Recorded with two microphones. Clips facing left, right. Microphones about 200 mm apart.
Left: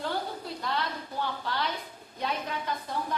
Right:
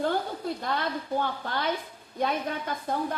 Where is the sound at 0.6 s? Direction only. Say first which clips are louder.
Right 3 dB; 50° right (ahead or behind).